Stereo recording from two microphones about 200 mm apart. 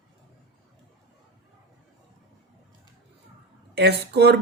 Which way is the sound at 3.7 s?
55° right (ahead or behind).